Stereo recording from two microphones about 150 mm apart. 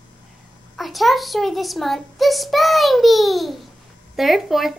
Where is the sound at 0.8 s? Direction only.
Centre (ahead or behind).